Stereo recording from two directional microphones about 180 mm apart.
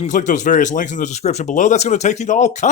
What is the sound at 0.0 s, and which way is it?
Speech, 45° left (ahead or behind).